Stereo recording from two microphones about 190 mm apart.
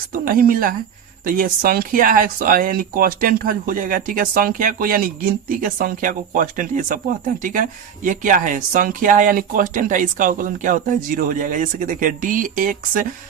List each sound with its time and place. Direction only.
0.1 s speech: 50° right (ahead or behind)